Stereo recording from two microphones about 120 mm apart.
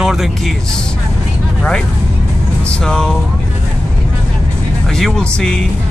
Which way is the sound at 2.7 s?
5° left (ahead or behind).